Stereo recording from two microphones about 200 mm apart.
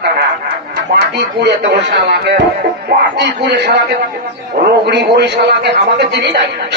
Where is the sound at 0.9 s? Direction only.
55° right (ahead or behind).